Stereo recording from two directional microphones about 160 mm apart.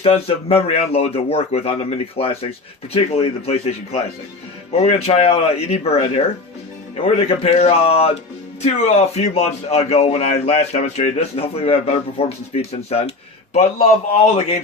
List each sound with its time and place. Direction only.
0.0 s speech: 35° left (ahead or behind)